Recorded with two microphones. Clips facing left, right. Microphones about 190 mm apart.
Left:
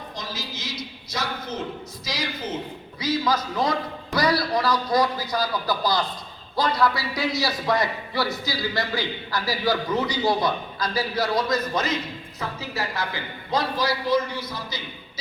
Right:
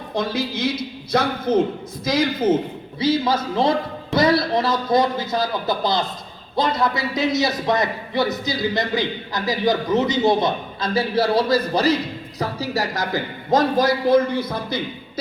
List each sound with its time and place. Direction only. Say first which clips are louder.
0.1 s a man's voice: right 15 dB; 60° right (ahead or behind)
3.0 s a man's voice: right 5 dB; 25° right (ahead or behind); by 15.2 s 55° right (ahead or behind)